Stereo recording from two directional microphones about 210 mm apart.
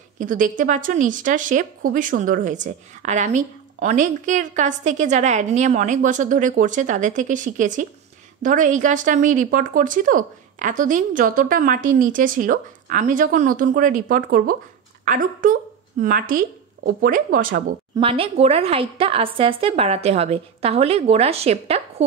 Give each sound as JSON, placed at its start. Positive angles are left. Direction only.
{"t": 0.2, "sound": "speech", "side_deg": -40}
{"t": 17.9, "sound": "a woman's voice", "side_deg": -25}